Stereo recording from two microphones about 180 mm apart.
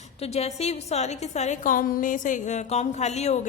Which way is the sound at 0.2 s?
35° left (ahead or behind).